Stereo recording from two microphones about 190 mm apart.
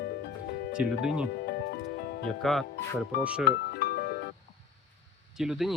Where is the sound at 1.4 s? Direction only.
60° left (ahead or behind).